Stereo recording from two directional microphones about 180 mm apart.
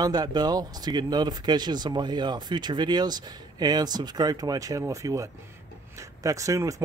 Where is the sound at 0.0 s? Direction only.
20° right (ahead or behind).